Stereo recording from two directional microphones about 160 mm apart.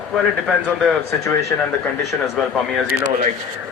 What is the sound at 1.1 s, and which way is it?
Speech, 20° left (ahead or behind).